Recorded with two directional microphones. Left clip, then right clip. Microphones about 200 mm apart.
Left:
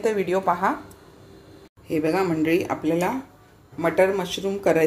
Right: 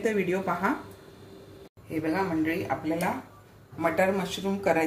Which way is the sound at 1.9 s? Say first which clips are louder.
Left 6 dB; 50° left (ahead or behind).